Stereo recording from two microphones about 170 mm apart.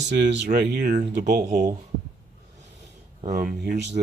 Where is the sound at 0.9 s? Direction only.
45° right (ahead or behind).